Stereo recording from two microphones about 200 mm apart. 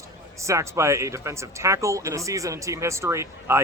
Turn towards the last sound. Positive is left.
turn(degrees=-15)  # may be behind; listen again after turning